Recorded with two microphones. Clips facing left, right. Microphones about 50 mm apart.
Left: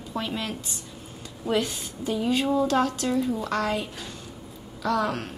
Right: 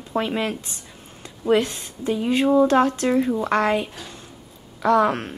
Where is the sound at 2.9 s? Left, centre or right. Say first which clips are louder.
Right 5 dB; right.